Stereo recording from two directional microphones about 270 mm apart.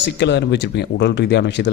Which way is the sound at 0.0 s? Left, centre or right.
Left.